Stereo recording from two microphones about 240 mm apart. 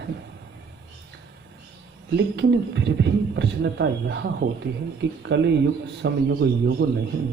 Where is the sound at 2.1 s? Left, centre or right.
Right.